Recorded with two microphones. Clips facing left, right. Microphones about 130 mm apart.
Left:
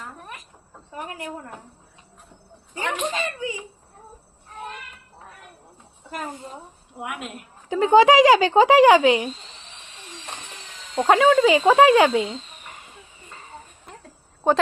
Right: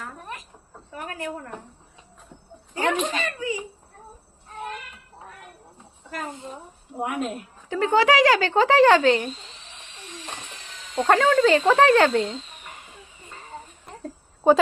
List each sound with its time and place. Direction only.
0.9 s speech: 20° left (ahead or behind)
2.7 s speech: 25° left (ahead or behind)
7.0 s speech: 35° right (ahead or behind)
7.7 s speech: 15° left (ahead or behind)
10.9 s speech: 10° left (ahead or behind)